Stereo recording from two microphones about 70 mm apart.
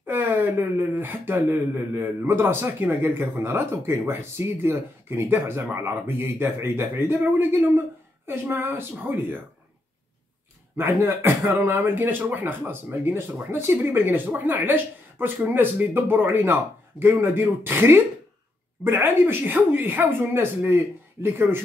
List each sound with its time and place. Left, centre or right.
0.0 s a sound: right
0.7 s a man's voice: right
10.8 s a man's voice: right